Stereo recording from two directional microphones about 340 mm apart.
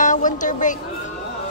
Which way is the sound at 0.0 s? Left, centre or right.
Left.